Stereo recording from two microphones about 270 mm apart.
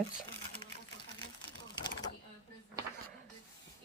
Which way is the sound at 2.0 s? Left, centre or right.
Left.